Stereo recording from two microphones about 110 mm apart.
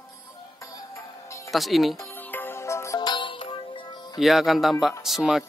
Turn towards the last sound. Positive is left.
turn(degrees=0)  # may be behind; listen again after turning